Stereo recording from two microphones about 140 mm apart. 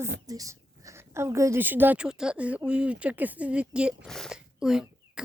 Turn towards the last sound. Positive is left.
turn(degrees=-5)  # may be behind; listen again after turning